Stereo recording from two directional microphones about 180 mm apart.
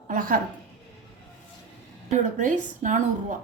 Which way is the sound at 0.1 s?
50° right (ahead or behind).